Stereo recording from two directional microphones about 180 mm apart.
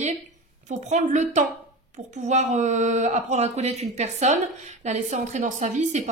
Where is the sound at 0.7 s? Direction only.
40° right (ahead or behind).